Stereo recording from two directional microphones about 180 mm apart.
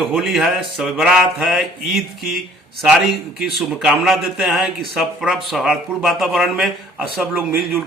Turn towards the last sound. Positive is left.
turn(degrees=-10)  # may be behind; listen again after turning